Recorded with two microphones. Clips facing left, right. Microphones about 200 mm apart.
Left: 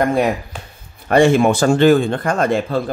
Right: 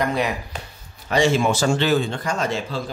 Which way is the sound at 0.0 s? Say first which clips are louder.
Left 6 dB; 50° left (ahead or behind).